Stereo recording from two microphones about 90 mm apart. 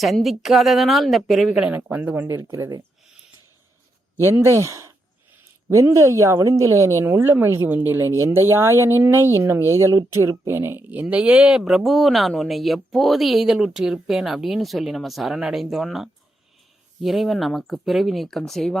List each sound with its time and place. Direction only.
0.0 s speech: centre (ahead or behind)
1.5 s speech: 15° right (ahead or behind)
2.4 s speech: 40° right (ahead or behind)
4.2 s speech: 30° right (ahead or behind); by 18.8 s 5° left (ahead or behind)